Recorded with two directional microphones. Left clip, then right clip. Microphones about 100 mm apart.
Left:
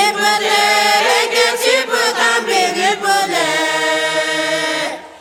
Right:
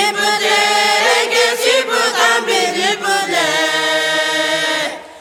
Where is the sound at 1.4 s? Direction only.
15° left (ahead or behind).